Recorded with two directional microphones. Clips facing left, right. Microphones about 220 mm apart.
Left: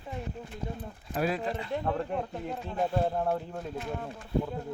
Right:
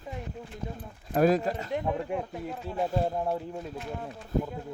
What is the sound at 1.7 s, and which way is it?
Speech, 15° right (ahead or behind).